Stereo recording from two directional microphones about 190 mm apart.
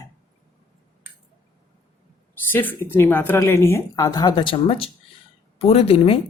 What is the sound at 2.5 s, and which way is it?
Speech, 10° left (ahead or behind).